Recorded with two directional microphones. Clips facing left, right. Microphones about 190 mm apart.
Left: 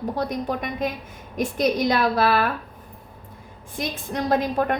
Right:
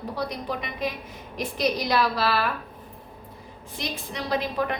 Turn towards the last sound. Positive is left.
turn(degrees=50)  # may be behind; listen again after turning